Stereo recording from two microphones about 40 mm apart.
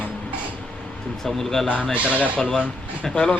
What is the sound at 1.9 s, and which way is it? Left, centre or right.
Speech, right.